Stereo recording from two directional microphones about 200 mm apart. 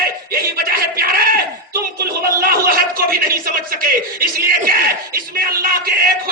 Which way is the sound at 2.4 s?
45° right (ahead or behind).